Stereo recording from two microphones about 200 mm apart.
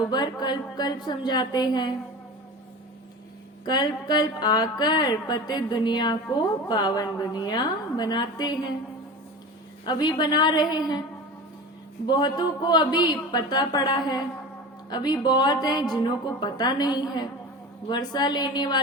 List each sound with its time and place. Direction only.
0.1 s speech: 20° left (ahead or behind)
3.7 s speech: 20° left (ahead or behind)
9.8 s speech: 20° left (ahead or behind)
12.0 s speech: 20° left (ahead or behind)